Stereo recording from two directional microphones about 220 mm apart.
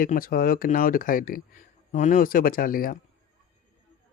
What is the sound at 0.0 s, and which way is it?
Speech, 40° left (ahead or behind).